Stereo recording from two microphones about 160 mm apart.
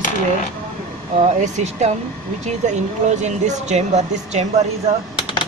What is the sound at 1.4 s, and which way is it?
Speech, 45° right (ahead or behind).